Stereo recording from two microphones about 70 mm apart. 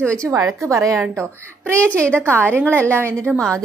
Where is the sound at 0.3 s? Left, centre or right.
Right.